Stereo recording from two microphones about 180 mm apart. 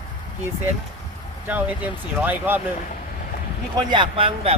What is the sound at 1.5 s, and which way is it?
Speech, 10° right (ahead or behind).